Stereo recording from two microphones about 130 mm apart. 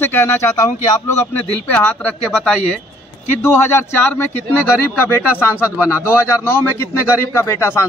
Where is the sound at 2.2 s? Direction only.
5° right (ahead or behind).